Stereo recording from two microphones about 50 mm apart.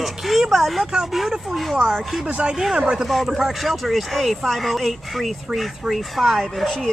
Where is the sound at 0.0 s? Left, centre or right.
Centre.